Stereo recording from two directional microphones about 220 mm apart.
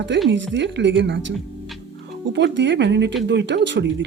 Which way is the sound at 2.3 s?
55° right (ahead or behind).